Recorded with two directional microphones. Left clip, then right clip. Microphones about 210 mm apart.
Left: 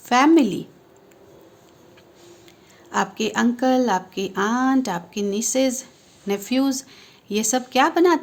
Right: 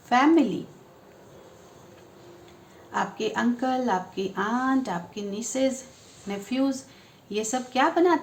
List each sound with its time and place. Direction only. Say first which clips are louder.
0.1 s a woman's voice: left 4 dB; 55° left (ahead or behind)
2.9 s a woman's voice: left 5 dB; 55° left (ahead or behind)